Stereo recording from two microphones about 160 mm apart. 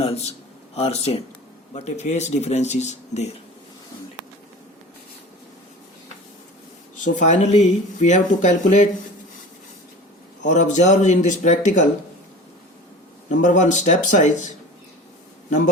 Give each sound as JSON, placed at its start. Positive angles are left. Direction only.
{"t": 0.0, "sound": "a man's voice", "side_deg": 40}
{"t": 7.0, "sound": "speech", "side_deg": 50}
{"t": 10.5, "sound": "speech", "side_deg": 50}
{"t": 13.2, "sound": "a man's voice", "side_deg": 50}